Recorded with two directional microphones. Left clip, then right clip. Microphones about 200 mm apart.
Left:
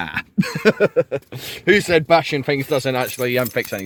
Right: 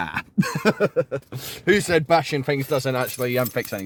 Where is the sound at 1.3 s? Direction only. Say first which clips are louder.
Left 4 dB; 10° right (ahead or behind).